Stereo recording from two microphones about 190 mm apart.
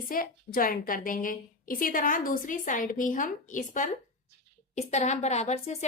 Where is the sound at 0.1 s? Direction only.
45° left (ahead or behind).